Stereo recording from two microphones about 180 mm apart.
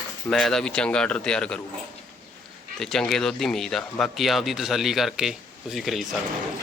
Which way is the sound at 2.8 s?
5° left (ahead or behind).